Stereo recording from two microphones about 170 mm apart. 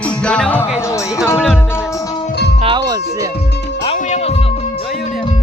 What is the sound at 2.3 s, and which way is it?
Music, 80° left.